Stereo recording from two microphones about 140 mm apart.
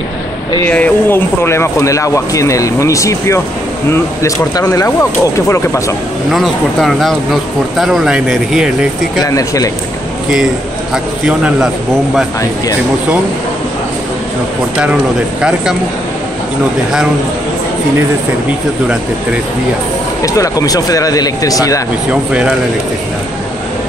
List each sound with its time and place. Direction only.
0.7 s speech: 10° left (ahead or behind)
6.3 s speech: centre (ahead or behind)
9.2 s speech: 25° left (ahead or behind)
11.2 s a man's voice: 5° right (ahead or behind)
20.2 s speech: 25° left (ahead or behind)